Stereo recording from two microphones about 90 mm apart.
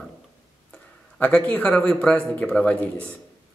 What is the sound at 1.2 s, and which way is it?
Speech, 15° left (ahead or behind).